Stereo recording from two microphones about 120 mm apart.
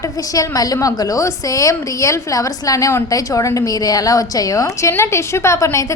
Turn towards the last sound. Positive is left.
turn(degrees=25)  # may be behind; listen again after turning